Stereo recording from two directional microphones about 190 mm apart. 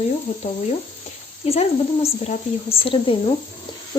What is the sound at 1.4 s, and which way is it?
Speech, 30° left (ahead or behind).